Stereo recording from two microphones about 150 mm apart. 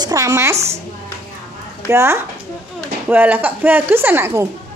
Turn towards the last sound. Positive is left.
turn(degrees=-15)  # may be behind; listen again after turning